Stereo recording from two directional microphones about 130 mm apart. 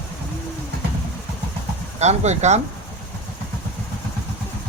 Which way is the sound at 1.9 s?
60° right (ahead or behind).